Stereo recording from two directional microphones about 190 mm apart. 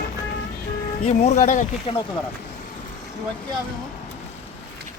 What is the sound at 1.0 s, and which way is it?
Speech, 35° left (ahead or behind).